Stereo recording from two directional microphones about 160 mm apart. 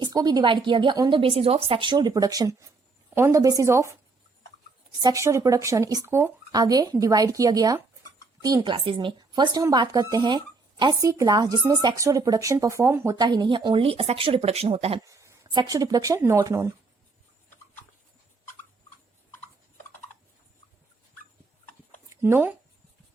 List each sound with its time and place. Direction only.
0.0 s speech: 25° right (ahead or behind)
5.0 s speech: 20° right (ahead or behind)
13.1 s speech: 25° right (ahead or behind)
15.0 s speech: 20° right (ahead or behind)
22.2 s speech: 10° right (ahead or behind)